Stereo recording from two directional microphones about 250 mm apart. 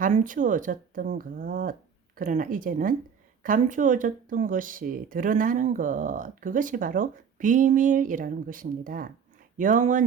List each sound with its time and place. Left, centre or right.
0.0 s speech: right